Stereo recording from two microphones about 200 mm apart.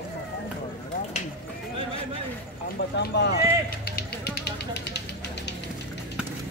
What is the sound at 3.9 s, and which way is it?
Music, 55° left (ahead or behind).